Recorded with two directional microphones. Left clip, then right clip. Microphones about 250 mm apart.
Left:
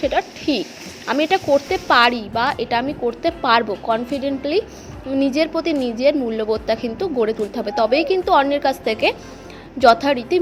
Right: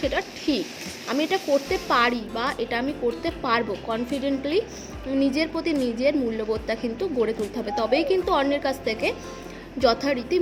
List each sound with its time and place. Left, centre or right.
0.0 s a woman's voice: centre